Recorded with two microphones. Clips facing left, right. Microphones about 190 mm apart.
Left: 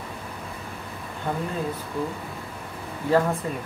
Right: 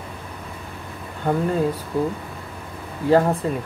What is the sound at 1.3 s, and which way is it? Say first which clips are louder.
Speech: right 7 dB; 50° right (ahead or behind).